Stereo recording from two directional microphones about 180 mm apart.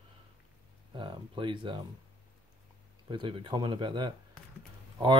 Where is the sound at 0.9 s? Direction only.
25° right (ahead or behind).